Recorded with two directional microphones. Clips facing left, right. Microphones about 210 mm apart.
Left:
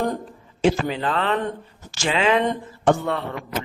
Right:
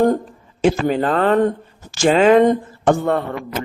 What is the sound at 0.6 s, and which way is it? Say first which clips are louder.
Speech: right 4 dB; 45° right (ahead or behind).